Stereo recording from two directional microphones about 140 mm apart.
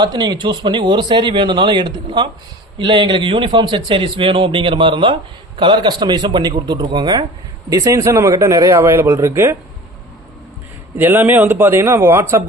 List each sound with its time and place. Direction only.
0.0 s speech: 30° right (ahead or behind)
10.9 s a man's voice: 15° right (ahead or behind)